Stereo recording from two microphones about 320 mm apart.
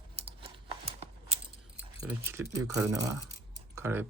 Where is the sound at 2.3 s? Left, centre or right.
Centre.